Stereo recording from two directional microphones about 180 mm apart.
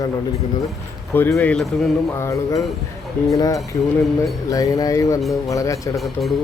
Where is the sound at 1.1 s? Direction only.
10° left (ahead or behind).